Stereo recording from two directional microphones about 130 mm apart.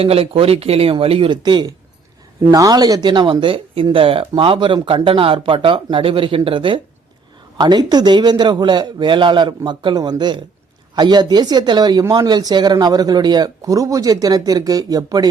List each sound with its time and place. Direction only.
0.0 s speech: 45° right (ahead or behind); by 15.3 s 30° right (ahead or behind)